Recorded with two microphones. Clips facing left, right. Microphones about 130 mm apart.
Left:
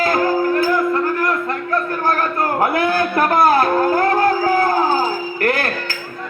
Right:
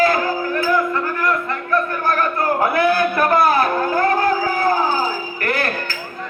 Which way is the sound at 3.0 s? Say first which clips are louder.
Even; 50° left (ahead or behind).